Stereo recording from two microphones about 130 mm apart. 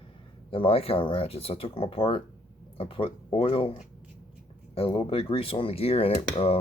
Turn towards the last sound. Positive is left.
turn(degrees=50)  # may be behind; listen again after turning